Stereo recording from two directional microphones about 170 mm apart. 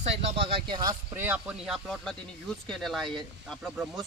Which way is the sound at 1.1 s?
10° right (ahead or behind).